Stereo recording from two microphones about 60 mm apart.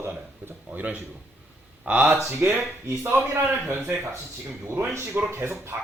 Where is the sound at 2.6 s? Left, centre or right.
Right.